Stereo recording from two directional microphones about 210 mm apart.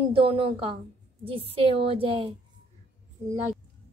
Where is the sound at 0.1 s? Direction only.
25° right (ahead or behind).